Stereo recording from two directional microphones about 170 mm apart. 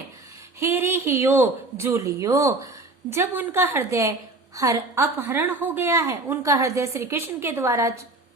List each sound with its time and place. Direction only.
0.6 s a woman's voice: 15° right (ahead or behind)